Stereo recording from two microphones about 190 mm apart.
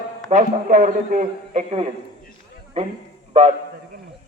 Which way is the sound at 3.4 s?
35° right (ahead or behind).